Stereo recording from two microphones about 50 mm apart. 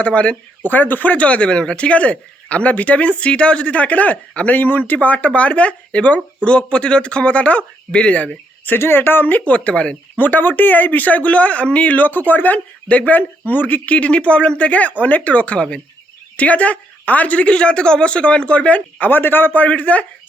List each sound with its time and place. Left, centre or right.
0.0 s speech: left
8.7 s speech: left
10.2 s speech: left